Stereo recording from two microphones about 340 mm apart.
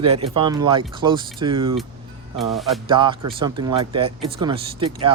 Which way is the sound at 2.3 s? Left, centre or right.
Centre.